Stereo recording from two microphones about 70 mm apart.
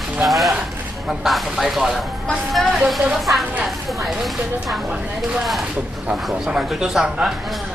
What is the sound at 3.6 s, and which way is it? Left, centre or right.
A man's voice, centre.